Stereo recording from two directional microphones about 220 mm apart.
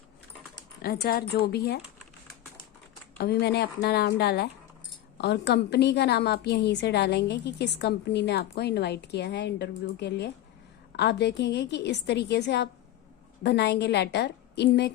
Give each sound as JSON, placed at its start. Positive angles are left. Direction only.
{"t": 0.8, "sound": "a woman's voice", "side_deg": 45}
{"t": 3.2, "sound": "a woman's voice", "side_deg": 45}